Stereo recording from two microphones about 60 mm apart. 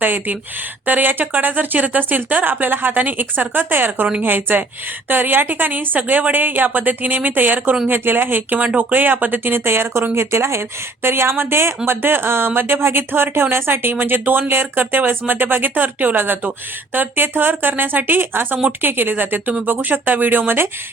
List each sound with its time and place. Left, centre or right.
0.0 s speech: right